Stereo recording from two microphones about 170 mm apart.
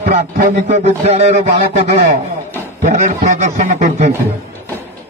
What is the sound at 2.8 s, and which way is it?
A man's voice, 45° right (ahead or behind).